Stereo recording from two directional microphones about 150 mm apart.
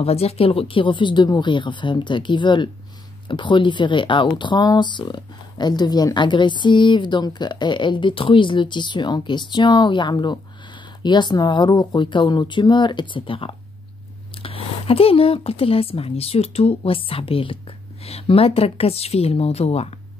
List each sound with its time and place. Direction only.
0.0 s speech: 45° left (ahead or behind)